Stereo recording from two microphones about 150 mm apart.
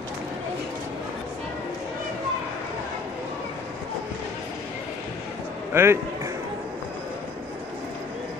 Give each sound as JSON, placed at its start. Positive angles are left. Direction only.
{"t": 5.7, "sound": "speech", "side_deg": -15}